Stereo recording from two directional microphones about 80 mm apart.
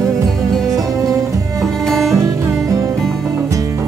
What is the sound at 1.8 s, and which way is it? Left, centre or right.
Music, centre.